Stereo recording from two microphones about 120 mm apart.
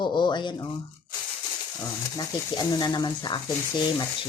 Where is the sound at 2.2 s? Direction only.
35° left (ahead or behind).